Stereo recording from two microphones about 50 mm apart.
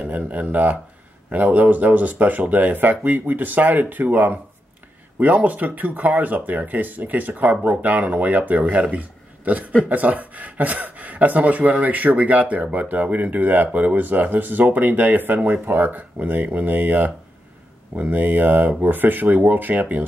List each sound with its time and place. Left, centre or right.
0.0 s speech: right